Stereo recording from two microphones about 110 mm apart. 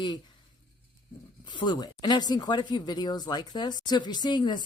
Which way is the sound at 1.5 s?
40° left (ahead or behind).